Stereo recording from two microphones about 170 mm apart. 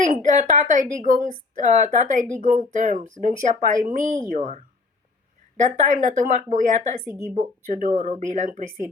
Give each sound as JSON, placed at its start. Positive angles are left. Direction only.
{"t": 0.0, "sound": "a woman's voice", "side_deg": -50}
{"t": 7.0, "sound": "speech", "side_deg": -15}
{"t": 7.3, "sound": "a woman's voice", "side_deg": -45}